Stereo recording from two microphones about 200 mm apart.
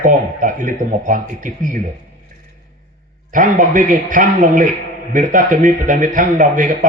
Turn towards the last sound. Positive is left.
turn(degrees=-40)  # may be behind; listen again after turning